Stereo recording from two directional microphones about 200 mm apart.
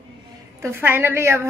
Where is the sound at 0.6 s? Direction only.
10° right (ahead or behind).